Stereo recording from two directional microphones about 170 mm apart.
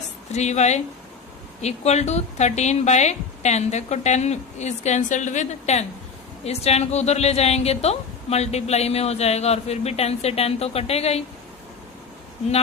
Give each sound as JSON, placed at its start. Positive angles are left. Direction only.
{"t": 0.3, "sound": "a woman's voice", "side_deg": 40}